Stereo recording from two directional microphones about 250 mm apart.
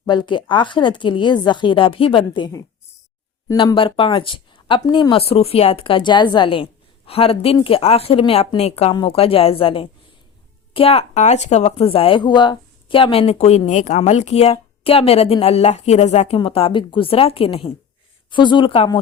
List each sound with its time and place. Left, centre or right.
0.0 s speech: centre